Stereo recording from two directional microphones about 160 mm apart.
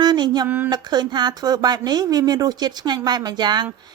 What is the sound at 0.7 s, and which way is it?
A woman's voice, 25° right (ahead or behind).